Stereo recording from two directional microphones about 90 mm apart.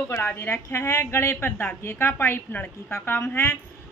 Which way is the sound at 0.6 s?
35° left (ahead or behind).